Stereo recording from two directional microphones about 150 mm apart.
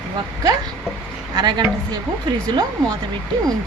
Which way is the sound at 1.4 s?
30° right (ahead or behind).